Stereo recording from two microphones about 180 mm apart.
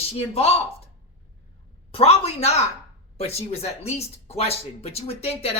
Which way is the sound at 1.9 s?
35° left (ahead or behind).